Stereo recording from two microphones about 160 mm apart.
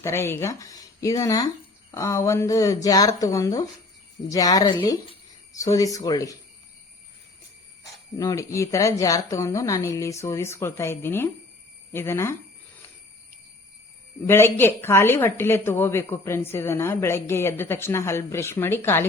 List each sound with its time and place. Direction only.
0.0 s speech: 15° left (ahead or behind)
8.2 s a woman's voice: 20° left (ahead or behind)
14.3 s a woman's voice: 15° left (ahead or behind)